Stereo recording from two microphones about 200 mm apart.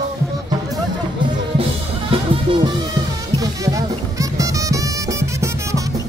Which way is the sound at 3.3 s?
15° right (ahead or behind).